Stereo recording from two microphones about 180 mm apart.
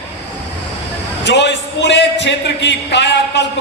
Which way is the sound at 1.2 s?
75° left (ahead or behind).